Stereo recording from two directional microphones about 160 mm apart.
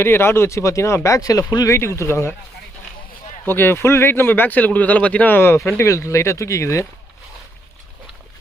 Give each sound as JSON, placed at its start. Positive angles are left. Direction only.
{"t": 0.0, "sound": "speech", "side_deg": 15}
{"t": 3.4, "sound": "speech", "side_deg": 15}